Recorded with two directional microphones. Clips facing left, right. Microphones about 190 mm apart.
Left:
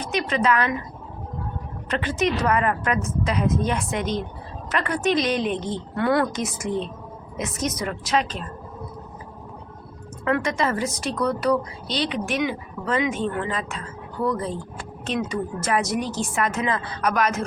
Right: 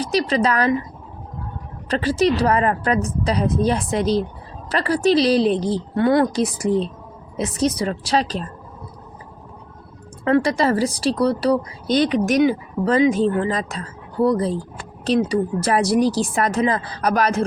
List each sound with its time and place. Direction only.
0.0 s speech: 35° right (ahead or behind)
1.9 s speech: 35° right (ahead or behind)
10.2 s speech: 30° right (ahead or behind)
11.9 s speech: 50° right (ahead or behind)
12.1 s speech: 40° right (ahead or behind)